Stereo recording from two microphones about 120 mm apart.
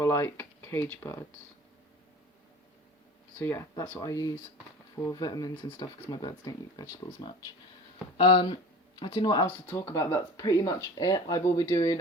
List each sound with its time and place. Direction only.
0.0 s speech: 20° left (ahead or behind)
3.3 s speech: 20° left (ahead or behind)
4.0 s speech: 30° left (ahead or behind)
9.6 s speech: 25° left (ahead or behind)